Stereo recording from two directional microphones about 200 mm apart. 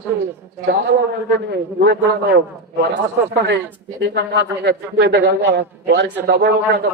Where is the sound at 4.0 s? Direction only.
55° right (ahead or behind).